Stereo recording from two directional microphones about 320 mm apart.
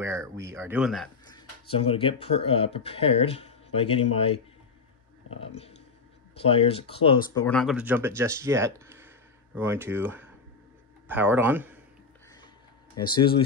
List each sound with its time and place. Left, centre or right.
0.0 s speech: centre
1.3 s speech: centre
6.3 s speech: centre
12.9 s speech: centre